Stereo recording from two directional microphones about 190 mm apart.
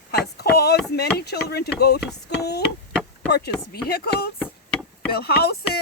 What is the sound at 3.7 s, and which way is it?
Speech, 55° left (ahead or behind).